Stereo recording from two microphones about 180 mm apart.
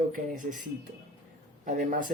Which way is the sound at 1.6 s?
45° right (ahead or behind).